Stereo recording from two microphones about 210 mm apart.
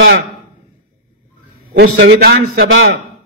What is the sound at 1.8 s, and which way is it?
Speech, 50° right (ahead or behind).